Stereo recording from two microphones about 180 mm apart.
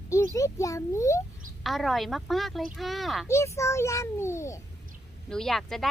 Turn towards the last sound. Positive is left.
turn(degrees=0)  # may be behind; listen again after turning